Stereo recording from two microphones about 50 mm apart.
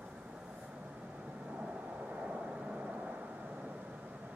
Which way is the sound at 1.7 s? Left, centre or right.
Right.